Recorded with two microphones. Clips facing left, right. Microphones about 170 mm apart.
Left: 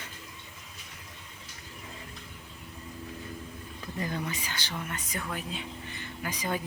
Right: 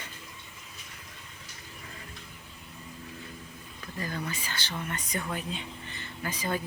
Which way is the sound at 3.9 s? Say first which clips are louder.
Left 1 dB; 20° left (ahead or behind).